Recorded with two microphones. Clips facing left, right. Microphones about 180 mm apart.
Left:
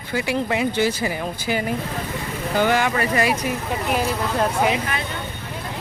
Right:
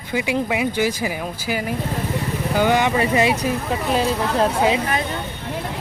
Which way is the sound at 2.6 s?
15° right (ahead or behind).